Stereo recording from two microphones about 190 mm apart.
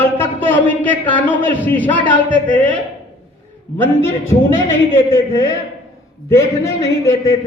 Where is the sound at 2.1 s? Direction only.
25° left (ahead or behind).